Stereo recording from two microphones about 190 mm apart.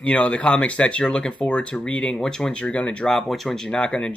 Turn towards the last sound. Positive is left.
turn(degrees=5)  # may be behind; listen again after turning